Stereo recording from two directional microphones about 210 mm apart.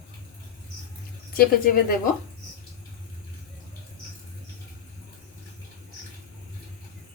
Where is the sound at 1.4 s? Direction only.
45° left (ahead or behind).